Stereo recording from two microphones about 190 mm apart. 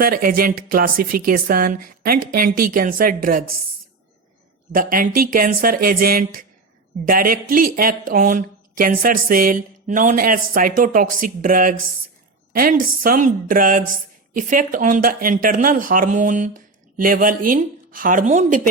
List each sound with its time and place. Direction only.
0.0 s a woman's voice: 50° right (ahead or behind)
4.7 s a woman's voice: 45° right (ahead or behind)